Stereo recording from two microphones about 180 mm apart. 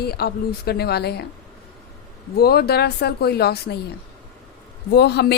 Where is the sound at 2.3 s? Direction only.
60° left (ahead or behind).